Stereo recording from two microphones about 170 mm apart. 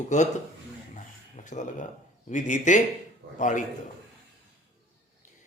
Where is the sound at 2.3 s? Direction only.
45° left (ahead or behind).